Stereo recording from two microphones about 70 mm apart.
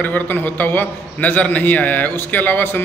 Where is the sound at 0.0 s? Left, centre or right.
Left.